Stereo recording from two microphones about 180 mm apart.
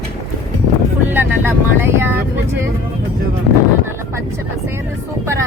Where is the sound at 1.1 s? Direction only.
10° right (ahead or behind).